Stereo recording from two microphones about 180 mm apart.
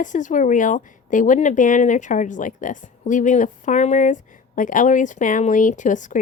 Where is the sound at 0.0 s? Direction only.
45° left (ahead or behind).